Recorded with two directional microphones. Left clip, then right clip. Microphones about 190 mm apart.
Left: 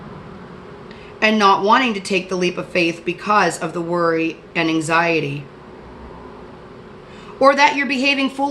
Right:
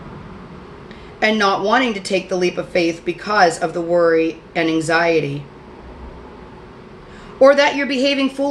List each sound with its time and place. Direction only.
1.2 s a woman's voice: 35° left (ahead or behind)
7.3 s a woman's voice: 35° left (ahead or behind)